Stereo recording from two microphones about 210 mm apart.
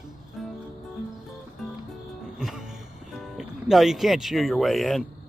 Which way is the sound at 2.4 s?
Centre (ahead or behind).